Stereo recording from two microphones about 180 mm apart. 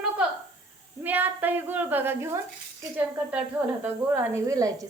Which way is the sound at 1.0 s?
10° right (ahead or behind).